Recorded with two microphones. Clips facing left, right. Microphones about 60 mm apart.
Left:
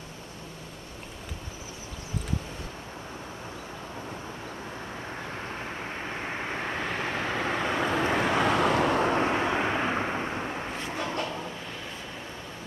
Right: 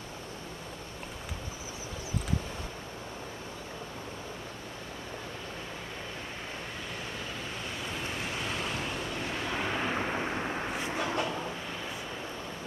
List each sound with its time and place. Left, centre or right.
6.0 s vehicle: left
9.5 s vehicle: left
10.2 s vehicle: centre